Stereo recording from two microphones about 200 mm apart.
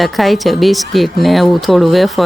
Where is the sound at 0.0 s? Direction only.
Centre (ahead or behind).